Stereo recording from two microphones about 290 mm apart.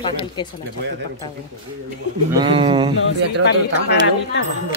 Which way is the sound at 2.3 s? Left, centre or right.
Centre.